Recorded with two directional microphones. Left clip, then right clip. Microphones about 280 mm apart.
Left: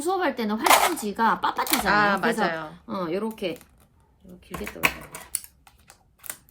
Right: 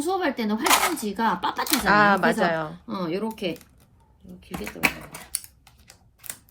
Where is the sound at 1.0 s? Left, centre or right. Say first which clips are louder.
Left 2 dB; centre.